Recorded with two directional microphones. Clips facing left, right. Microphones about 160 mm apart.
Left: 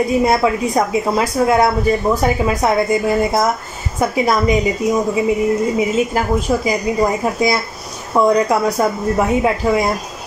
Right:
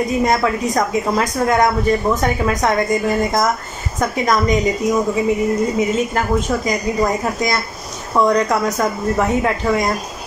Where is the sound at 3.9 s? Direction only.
10° left (ahead or behind).